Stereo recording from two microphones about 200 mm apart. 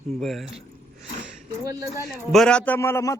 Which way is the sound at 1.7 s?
15° right (ahead or behind).